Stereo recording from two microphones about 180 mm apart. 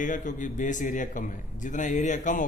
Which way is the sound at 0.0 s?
45° left (ahead or behind).